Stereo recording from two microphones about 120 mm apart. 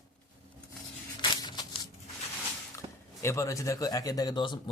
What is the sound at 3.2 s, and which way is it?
Speech, 25° left (ahead or behind).